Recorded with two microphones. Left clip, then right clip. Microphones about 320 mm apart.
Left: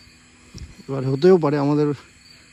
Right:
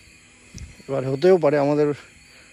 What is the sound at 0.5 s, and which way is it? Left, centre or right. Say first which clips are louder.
Speech: right 3 dB; centre.